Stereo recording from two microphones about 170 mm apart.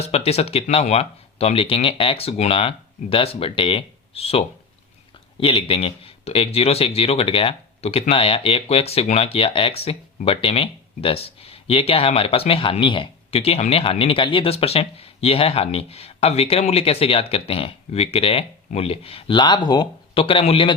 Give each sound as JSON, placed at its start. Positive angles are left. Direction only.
{"t": 0.1, "sound": "speech", "side_deg": 35}